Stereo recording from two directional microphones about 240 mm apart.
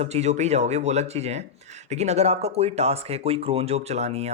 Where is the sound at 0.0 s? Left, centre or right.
Right.